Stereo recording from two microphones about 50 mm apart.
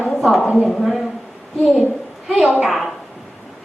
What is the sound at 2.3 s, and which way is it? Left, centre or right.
Speech, centre.